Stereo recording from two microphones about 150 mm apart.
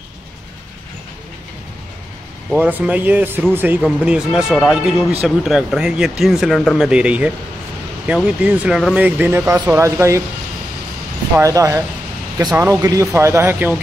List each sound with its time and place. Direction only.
2.5 s speech: 10° right (ahead or behind)
11.4 s speech: 20° right (ahead or behind)